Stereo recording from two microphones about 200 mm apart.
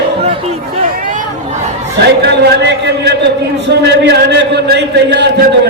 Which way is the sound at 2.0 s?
55° right (ahead or behind).